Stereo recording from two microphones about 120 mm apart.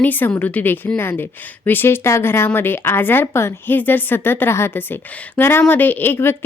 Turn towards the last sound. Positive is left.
turn(degrees=20)  # may be behind; listen again after turning